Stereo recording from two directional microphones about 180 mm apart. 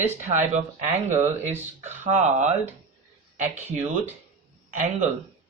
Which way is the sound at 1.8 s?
40° right (ahead or behind).